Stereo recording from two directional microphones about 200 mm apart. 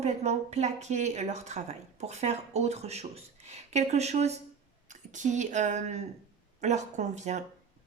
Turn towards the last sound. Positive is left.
turn(degrees=-35)  # may be behind; listen again after turning